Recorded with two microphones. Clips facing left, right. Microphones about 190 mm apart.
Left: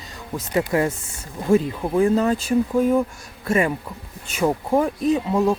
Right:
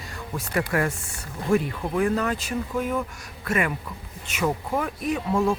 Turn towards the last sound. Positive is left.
turn(degrees=20)  # may be behind; listen again after turning